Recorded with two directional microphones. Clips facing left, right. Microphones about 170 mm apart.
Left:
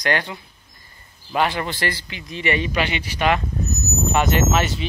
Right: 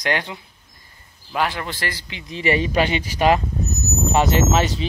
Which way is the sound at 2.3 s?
35° right (ahead or behind).